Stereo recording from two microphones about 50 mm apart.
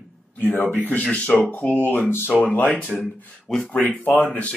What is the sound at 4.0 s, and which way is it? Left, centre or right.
Speech, left.